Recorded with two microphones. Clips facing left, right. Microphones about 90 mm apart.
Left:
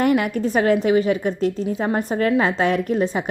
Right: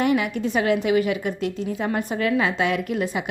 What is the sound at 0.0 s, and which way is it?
A woman's voice, 45° left (ahead or behind).